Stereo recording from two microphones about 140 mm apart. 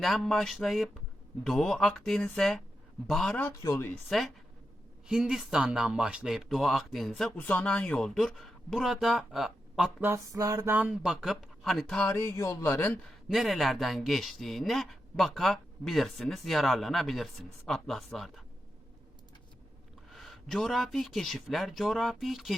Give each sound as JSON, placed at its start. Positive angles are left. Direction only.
{"t": 0.0, "sound": "speech", "side_deg": 0}
{"t": 3.3, "sound": "speech", "side_deg": 15}
{"t": 5.0, "sound": "speech", "side_deg": -5}
{"t": 10.0, "sound": "speech", "side_deg": -20}
{"t": 12.0, "sound": "speech", "side_deg": 15}
{"t": 13.2, "sound": "speech", "side_deg": 0}
{"t": 20.1, "sound": "speech", "side_deg": 0}